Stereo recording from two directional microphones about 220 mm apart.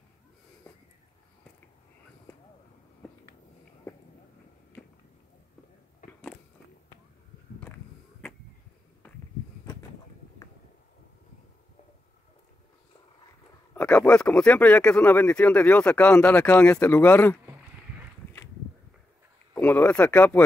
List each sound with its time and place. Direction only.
6.0 s biting: 35° left (ahead or behind)
13.7 s speech: 5° left (ahead or behind)
19.5 s speech: 5° left (ahead or behind)